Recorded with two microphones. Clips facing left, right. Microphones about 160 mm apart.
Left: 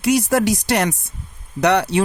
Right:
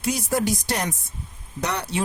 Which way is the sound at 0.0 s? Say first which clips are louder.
Left 7 dB; 70° left (ahead or behind).